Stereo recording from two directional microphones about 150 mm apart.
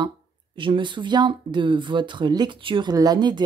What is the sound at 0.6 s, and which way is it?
Speech, 35° right (ahead or behind).